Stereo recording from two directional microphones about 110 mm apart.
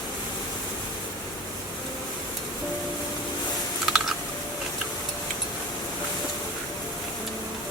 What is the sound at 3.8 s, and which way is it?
Typing, 5° right (ahead or behind).